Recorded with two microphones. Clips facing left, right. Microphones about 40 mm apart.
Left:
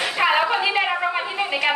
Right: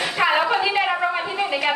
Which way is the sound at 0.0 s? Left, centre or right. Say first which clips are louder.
Even; centre.